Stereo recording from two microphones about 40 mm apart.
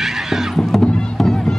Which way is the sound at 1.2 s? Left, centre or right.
Centre.